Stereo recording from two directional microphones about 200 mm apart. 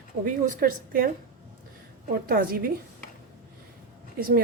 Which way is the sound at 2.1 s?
50° right (ahead or behind).